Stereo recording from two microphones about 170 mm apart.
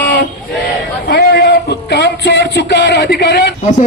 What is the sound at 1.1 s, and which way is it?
Music, 80° left.